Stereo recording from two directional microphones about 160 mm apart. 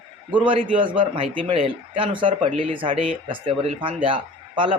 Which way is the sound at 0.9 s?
35° right (ahead or behind).